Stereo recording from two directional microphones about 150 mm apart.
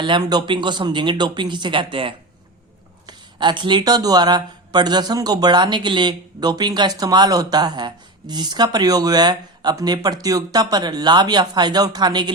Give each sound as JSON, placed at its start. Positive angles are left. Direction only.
{"t": 0.0, "sound": "speech", "side_deg": -30}